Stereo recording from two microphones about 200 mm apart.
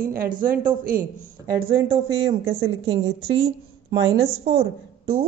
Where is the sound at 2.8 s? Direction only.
25° right (ahead or behind).